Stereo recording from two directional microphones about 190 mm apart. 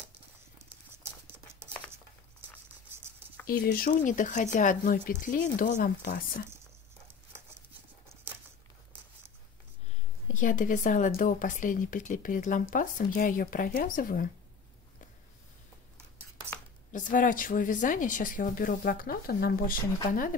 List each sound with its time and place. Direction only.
1.2 s patter: 15° right (ahead or behind)
3.4 s speech: 50° left (ahead or behind)
7.1 s horse: 15° right (ahead or behind)
8.1 s a sound: 10° right (ahead or behind)
10.2 s speech: 45° left (ahead or behind)
16.9 s speech: 45° left (ahead or behind)